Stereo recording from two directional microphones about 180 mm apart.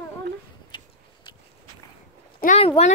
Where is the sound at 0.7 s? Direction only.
25° left (ahead or behind).